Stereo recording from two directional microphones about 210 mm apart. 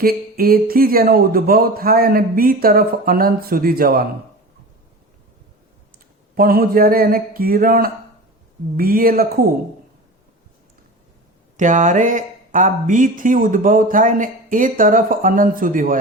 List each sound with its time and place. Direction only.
0.0 s a man's voice: 45° right (ahead or behind)
6.3 s a man's voice: 45° right (ahead or behind)
11.5 s speech: 35° right (ahead or behind)